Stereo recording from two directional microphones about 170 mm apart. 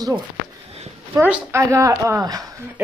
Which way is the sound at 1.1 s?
10° right (ahead or behind).